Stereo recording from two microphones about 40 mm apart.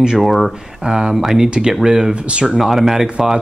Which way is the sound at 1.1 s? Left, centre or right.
Centre.